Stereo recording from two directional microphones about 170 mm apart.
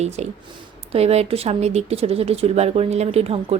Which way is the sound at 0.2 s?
40° right (ahead or behind).